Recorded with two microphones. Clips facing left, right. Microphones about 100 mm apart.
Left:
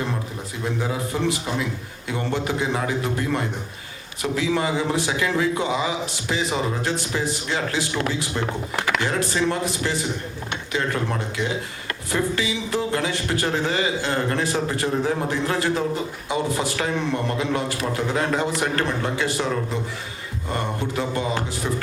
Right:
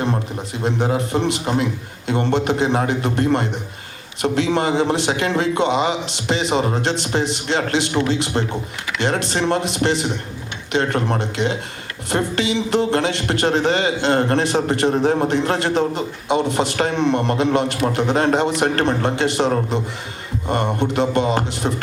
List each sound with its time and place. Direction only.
0.6 s speech: 70° right (ahead or behind)